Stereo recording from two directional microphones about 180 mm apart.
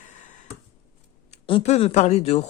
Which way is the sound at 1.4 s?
35° left (ahead or behind).